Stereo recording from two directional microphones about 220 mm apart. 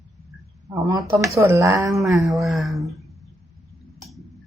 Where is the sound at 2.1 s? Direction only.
Centre (ahead or behind).